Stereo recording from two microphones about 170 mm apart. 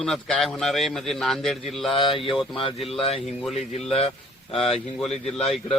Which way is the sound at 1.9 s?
30° left (ahead or behind).